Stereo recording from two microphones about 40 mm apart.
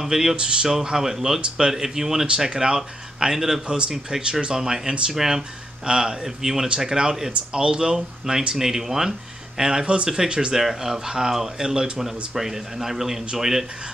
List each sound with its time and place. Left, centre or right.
0.0 s speech: centre
0.4 s speech: right
0.7 s speech: centre
4.6 s speech: centre
10.5 s speech: centre